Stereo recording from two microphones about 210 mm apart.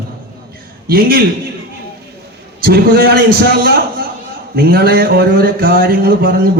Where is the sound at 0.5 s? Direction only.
45° right (ahead or behind).